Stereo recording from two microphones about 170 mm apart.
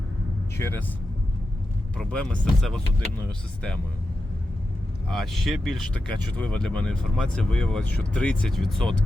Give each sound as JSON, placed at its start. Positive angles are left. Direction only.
{"t": 0.5, "sound": "speech", "side_deg": 15}
{"t": 2.0, "sound": "speech", "side_deg": 5}
{"t": 5.1, "sound": "speech", "side_deg": 0}